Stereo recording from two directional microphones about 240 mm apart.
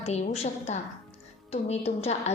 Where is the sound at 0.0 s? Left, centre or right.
Left.